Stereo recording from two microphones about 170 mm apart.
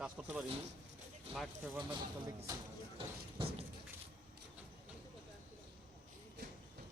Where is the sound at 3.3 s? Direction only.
30° right (ahead or behind).